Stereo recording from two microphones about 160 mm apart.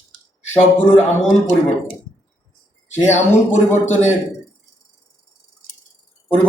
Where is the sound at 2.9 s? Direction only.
45° left (ahead or behind).